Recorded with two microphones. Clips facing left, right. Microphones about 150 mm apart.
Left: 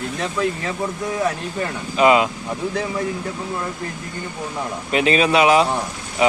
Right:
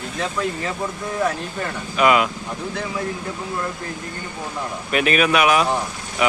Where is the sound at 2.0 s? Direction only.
25° left (ahead or behind).